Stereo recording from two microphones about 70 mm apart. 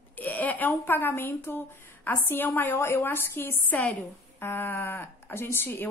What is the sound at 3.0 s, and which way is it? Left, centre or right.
A woman's voice, left.